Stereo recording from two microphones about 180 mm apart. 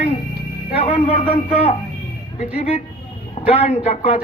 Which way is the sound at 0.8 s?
35° left (ahead or behind).